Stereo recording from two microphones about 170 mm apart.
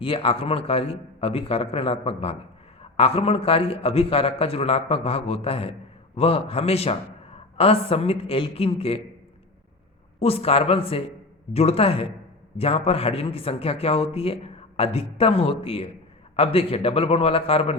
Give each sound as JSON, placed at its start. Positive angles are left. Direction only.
{"t": 0.0, "sound": "a man's voice", "side_deg": 35}
{"t": 10.2, "sound": "a man's voice", "side_deg": 35}